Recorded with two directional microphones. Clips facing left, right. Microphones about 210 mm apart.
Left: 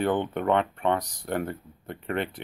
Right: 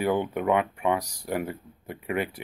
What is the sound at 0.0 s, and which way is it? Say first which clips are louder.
Speech: even; 10° right (ahead or behind).